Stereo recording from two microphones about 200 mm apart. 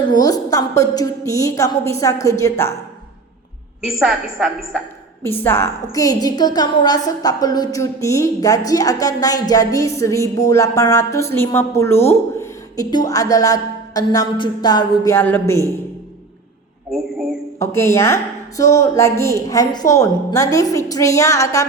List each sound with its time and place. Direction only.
0.1 s a woman's voice: 20° left (ahead or behind)
3.8 s a woman's voice: 5° right (ahead or behind)
5.2 s a woman's voice: 10° left (ahead or behind)
16.9 s a woman's voice: 5° right (ahead or behind)
17.6 s a woman's voice: 15° left (ahead or behind)